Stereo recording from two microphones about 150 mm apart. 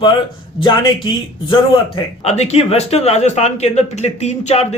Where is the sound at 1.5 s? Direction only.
40° left (ahead or behind).